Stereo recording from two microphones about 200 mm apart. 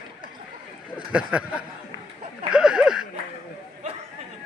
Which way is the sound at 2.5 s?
5° right (ahead or behind).